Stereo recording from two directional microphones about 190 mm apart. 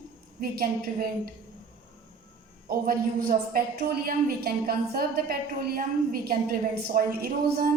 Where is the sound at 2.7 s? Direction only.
50° right (ahead or behind).